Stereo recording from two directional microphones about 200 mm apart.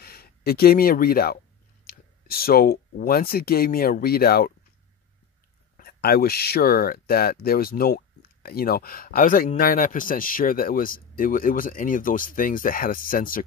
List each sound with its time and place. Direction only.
0.0 s speech: 50° left (ahead or behind)
5.8 s speech: 50° left (ahead or behind)